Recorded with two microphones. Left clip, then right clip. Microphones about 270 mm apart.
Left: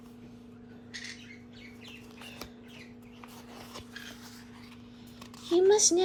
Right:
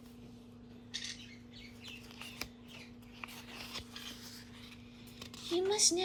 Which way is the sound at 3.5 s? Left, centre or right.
Centre.